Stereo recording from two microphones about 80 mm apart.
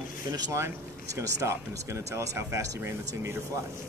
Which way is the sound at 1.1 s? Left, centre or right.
Right.